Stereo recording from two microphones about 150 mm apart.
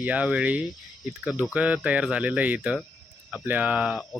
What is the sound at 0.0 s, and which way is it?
Speech, 10° right (ahead or behind).